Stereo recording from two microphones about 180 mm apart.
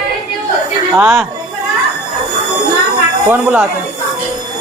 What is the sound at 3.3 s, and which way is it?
Speech, 10° right (ahead or behind).